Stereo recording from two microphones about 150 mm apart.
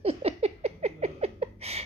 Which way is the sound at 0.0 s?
40° right (ahead or behind).